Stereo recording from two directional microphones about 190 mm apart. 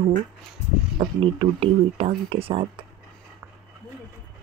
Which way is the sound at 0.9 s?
30° right (ahead or behind).